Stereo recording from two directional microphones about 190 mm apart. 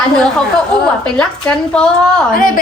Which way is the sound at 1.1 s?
5° left (ahead or behind).